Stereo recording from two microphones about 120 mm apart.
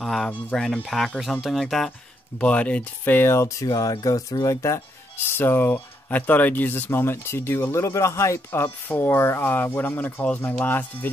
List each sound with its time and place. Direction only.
0.0 s speech: centre (ahead or behind)